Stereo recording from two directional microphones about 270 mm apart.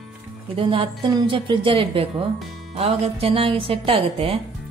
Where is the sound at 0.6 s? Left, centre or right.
Centre.